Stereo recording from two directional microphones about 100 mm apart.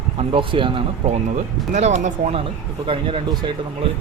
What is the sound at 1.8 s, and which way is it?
Speech, 90° right.